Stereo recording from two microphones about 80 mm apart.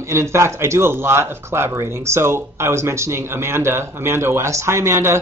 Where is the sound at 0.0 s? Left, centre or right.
Right.